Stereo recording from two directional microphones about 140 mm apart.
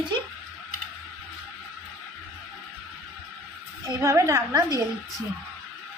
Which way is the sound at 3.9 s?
20° right (ahead or behind).